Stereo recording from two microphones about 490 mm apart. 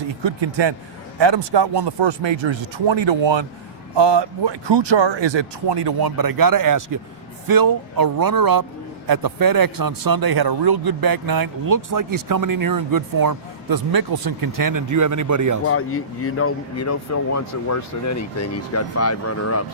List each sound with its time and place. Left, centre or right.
0.2 s a man's voice: right
15.6 s speech: left